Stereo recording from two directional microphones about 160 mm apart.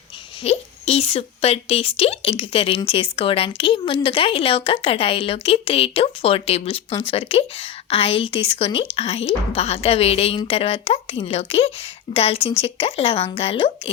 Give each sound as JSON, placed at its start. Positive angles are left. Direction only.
{"t": 0.4, "sound": "speech", "side_deg": 40}